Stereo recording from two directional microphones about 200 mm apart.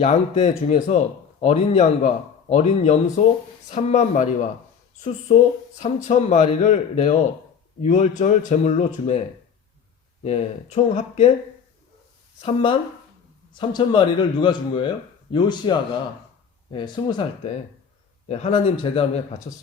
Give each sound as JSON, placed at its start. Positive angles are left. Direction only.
{"t": 0.0, "sound": "a man's voice", "side_deg": 35}
{"t": 10.2, "sound": "a man's voice", "side_deg": 35}
{"t": 12.4, "sound": "a man's voice", "side_deg": 30}